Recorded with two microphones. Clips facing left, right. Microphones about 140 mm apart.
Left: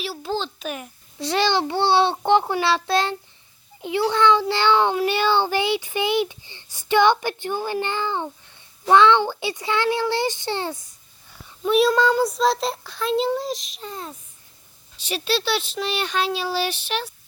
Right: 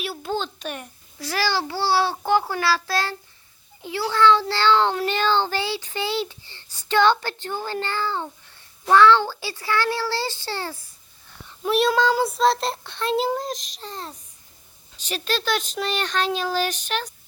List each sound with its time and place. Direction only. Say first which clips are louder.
0.0 s a child's voice: even; centre (ahead or behind)
1.2 s a child's voice: left 4 dB; 25° left (ahead or behind)
11.6 s a child's voice: left 2 dB; centre (ahead or behind)
15.1 s a child's voice: left 2 dB; 10° left (ahead or behind)
16.6 s speech: even; 45° right (ahead or behind)